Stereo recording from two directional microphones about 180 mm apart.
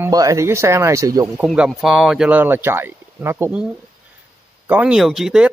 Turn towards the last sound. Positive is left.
turn(degrees=-5)  # may be behind; listen again after turning